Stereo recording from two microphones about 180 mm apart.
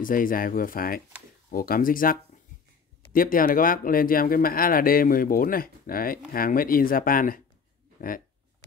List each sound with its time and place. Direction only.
0.0 s speech: 50° left (ahead or behind)